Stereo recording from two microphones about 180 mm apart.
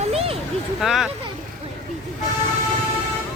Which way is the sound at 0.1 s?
35° right (ahead or behind).